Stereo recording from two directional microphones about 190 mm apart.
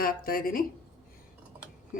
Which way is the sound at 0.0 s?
50° left (ahead or behind).